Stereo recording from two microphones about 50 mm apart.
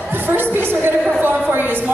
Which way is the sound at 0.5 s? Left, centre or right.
Right.